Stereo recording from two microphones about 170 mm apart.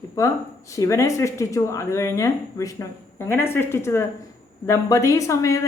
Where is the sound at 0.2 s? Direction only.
20° left (ahead or behind).